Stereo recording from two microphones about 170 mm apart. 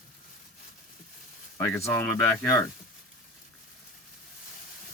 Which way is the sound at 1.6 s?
15° left (ahead or behind).